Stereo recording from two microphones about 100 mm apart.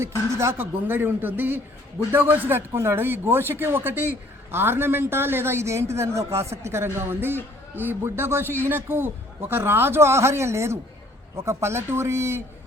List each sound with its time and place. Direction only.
0.0 s a man's voice: 30° right (ahead or behind)